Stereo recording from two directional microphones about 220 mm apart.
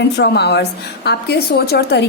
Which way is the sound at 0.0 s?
50° left (ahead or behind).